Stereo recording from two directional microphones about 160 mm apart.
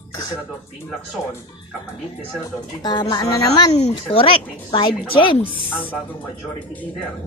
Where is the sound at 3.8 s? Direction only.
35° left (ahead or behind).